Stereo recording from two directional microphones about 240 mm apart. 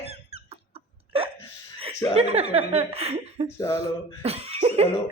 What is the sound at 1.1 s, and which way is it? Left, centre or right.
Hiccup, right.